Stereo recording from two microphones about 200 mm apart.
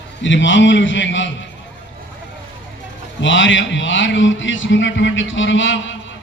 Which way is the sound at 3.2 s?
70° left (ahead or behind).